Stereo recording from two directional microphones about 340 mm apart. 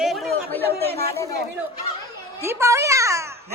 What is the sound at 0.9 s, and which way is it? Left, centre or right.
Speech, right.